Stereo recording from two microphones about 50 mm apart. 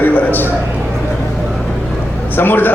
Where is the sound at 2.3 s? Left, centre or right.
Left.